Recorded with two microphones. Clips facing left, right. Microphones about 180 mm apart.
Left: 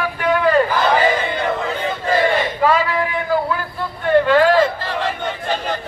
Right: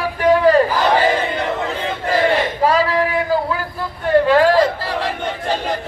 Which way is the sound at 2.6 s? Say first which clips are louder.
Right 1 dB; 35° right (ahead or behind).